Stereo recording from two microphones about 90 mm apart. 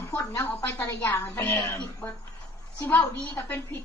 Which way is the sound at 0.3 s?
30° left (ahead or behind).